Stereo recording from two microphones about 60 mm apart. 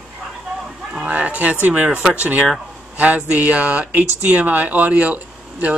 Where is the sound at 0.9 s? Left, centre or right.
Right.